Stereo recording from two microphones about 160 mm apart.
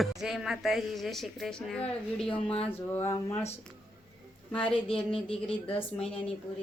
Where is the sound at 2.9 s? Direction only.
15° left (ahead or behind).